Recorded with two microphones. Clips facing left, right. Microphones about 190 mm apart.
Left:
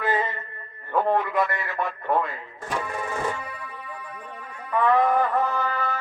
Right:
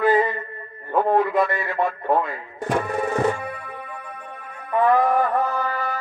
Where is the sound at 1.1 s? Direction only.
25° right (ahead or behind).